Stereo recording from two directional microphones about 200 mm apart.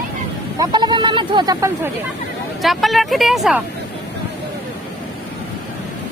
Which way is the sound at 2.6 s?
Centre (ahead or behind).